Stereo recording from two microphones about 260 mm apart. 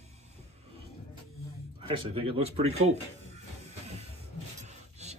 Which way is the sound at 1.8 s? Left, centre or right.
Centre.